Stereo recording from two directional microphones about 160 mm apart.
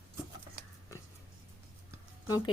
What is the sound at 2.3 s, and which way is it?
Speech, 25° left (ahead or behind).